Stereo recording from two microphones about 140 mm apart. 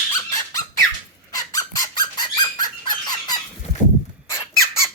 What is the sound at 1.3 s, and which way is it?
Squeak, 25° left (ahead or behind).